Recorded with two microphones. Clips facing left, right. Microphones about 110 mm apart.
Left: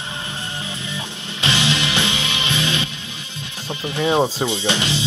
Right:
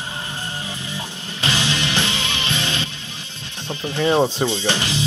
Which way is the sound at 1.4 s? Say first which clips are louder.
Left 2 dB; 20° left (ahead or behind).